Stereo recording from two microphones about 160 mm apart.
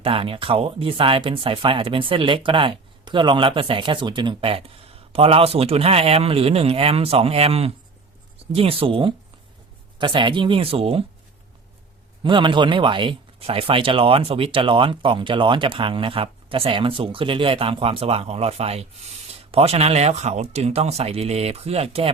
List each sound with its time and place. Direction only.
0.0 s speech: 35° right (ahead or behind)
12.2 s speech: 30° right (ahead or behind)